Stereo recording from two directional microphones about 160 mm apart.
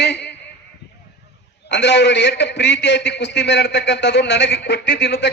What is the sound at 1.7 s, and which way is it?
A man's voice, 90° left.